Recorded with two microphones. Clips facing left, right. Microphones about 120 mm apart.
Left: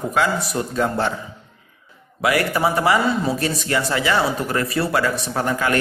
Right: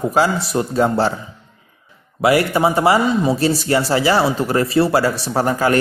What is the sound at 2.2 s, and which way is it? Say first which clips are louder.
A man's voice: right 4 dB; 30° right (ahead or behind).